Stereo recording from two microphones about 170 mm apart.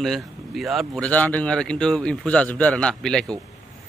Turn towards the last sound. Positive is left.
turn(degrees=5)  # may be behind; listen again after turning